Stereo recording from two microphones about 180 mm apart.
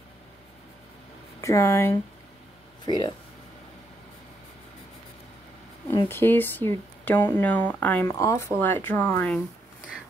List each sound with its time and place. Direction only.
1.4 s speech: 15° left (ahead or behind)
6.0 s speech: 10° left (ahead or behind)